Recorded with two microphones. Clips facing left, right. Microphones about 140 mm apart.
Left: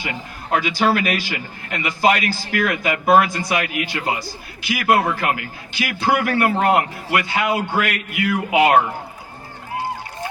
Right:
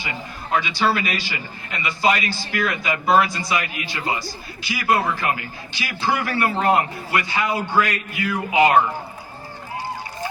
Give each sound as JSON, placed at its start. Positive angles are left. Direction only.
{"t": 0.0, "sound": "a man's voice", "side_deg": 55}